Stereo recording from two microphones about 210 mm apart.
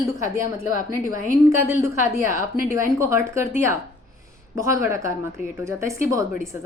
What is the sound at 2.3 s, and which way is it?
A woman's voice, 15° right (ahead or behind).